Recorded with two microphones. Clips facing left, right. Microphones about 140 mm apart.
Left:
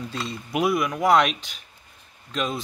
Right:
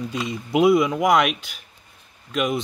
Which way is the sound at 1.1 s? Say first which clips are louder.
Even; 10° right (ahead or behind).